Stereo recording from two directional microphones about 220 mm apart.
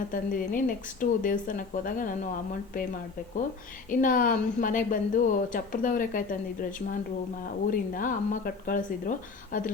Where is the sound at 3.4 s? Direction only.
40° left (ahead or behind).